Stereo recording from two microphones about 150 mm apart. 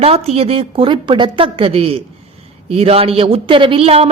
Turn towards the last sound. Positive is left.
turn(degrees=-40)  # may be behind; listen again after turning